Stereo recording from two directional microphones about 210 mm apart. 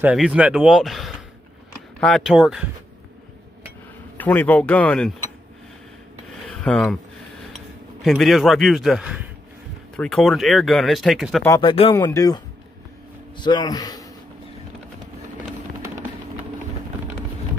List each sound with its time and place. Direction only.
0.0 s speech: 5° right (ahead or behind)
4.2 s speech: 10° left (ahead or behind)
6.4 s filing: 5° left (ahead or behind)
7.5 s speech: centre (ahead or behind)
11.4 s speech: 15° left (ahead or behind)
13.4 s a man's voice: 20° left (ahead or behind)